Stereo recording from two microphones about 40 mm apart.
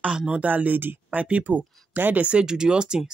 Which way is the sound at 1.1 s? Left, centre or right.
Right.